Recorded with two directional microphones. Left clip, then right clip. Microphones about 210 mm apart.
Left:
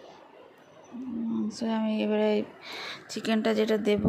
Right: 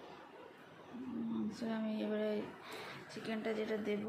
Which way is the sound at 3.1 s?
50° left (ahead or behind).